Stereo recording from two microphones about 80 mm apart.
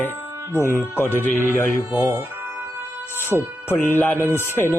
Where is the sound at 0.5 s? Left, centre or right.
Left.